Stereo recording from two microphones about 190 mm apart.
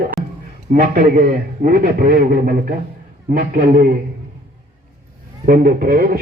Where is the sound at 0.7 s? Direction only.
50° right (ahead or behind).